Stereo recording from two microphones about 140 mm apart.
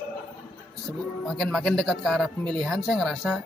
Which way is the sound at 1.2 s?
Centre (ahead or behind).